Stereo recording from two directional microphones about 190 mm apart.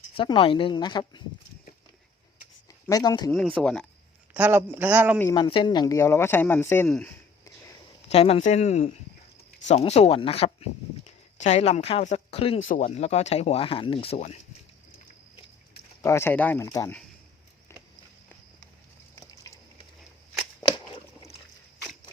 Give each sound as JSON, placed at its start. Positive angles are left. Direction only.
{"t": 0.2, "sound": "speech", "side_deg": 25}
{"t": 2.9, "sound": "speech", "side_deg": 20}
{"t": 3.3, "sound": "speech", "side_deg": 0}
{"t": 4.4, "sound": "a man's voice", "side_deg": -10}
{"t": 5.3, "sound": "speech", "side_deg": 25}
{"t": 8.0, "sound": "speech", "side_deg": 30}
{"t": 12.6, "sound": "speech", "side_deg": 45}
{"t": 16.0, "sound": "speech", "side_deg": 15}
{"t": 16.6, "sound": "speech", "side_deg": 20}
{"t": 19.1, "sound": "a sound", "side_deg": 15}
{"t": 20.6, "sound": "a sound", "side_deg": 25}